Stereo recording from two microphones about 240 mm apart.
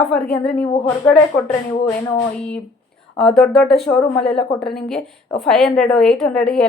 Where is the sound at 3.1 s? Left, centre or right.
Centre.